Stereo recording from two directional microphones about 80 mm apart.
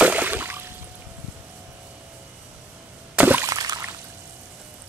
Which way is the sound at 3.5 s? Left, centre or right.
Right.